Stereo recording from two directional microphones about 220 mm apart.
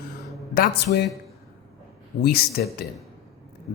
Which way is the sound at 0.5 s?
45° left (ahead or behind).